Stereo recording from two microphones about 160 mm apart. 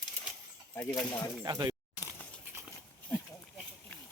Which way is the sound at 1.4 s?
20° right (ahead or behind).